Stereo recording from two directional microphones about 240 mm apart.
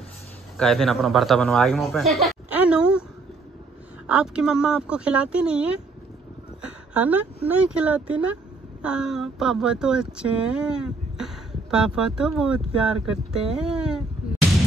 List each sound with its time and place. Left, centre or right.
0.6 s speech: centre
4.1 s speech: centre
6.6 s a sound: centre
7.4 s speech: centre